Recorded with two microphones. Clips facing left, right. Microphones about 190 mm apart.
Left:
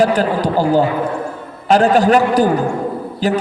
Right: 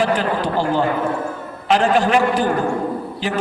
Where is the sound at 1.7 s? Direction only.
40° left (ahead or behind).